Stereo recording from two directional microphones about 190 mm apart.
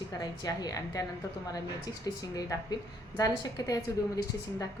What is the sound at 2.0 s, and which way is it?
A woman's voice, 20° left (ahead or behind).